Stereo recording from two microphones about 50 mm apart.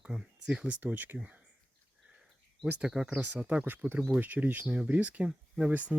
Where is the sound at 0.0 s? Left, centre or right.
Centre.